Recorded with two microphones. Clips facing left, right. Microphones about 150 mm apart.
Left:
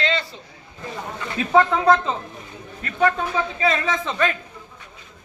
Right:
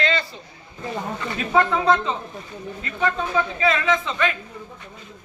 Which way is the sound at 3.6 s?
35° left (ahead or behind).